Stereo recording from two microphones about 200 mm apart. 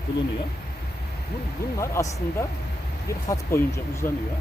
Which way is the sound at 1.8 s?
15° left (ahead or behind).